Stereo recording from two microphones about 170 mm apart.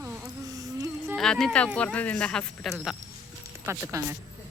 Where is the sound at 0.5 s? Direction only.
20° right (ahead or behind).